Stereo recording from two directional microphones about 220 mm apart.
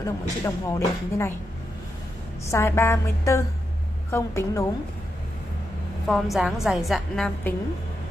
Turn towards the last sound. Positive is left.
turn(degrees=0)  # may be behind; listen again after turning